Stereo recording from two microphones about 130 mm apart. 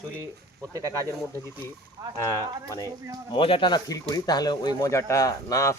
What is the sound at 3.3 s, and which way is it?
Speech, 40° left (ahead or behind).